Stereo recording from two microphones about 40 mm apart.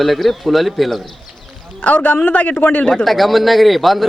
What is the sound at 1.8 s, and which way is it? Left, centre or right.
Speech, left.